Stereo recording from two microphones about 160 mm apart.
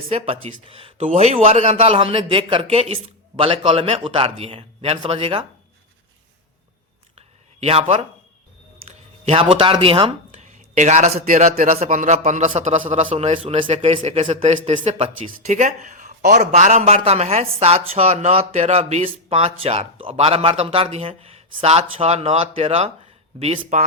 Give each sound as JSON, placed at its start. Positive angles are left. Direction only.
{"t": 0.1, "sound": "a man's voice", "side_deg": -35}
{"t": 7.2, "sound": "a sound", "side_deg": -40}
{"t": 9.2, "sound": "a man's voice", "side_deg": -35}
{"t": 10.4, "sound": "a man's voice", "side_deg": -50}